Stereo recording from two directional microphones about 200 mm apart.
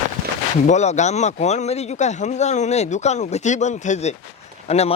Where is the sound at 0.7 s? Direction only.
35° left (ahead or behind).